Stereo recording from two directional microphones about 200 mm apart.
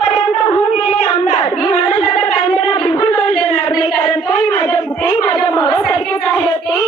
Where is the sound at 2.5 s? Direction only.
Centre (ahead or behind).